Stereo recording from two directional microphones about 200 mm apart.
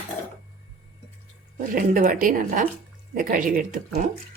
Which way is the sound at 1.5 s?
45° right (ahead or behind).